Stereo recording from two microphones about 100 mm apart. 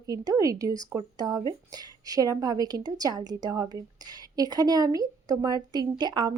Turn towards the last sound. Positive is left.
turn(degrees=-45)  # may be behind; listen again after turning